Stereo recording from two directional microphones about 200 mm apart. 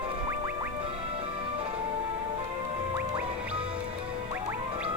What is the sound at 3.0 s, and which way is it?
Music, 5° right (ahead or behind).